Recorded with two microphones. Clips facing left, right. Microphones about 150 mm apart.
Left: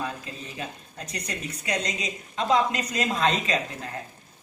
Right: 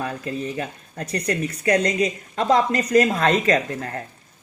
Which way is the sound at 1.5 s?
60° right (ahead or behind).